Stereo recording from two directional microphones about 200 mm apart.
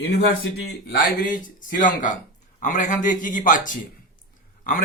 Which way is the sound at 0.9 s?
40° left (ahead or behind).